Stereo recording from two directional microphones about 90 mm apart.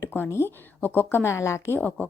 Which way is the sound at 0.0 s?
25° left (ahead or behind).